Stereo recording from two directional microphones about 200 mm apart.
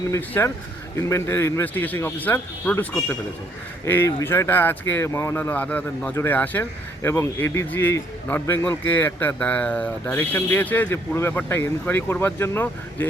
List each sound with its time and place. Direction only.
0.1 s speech: 10° left (ahead or behind)